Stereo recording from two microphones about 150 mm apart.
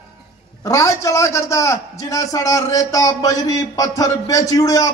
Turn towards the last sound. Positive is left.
turn(degrees=25)  # may be behind; listen again after turning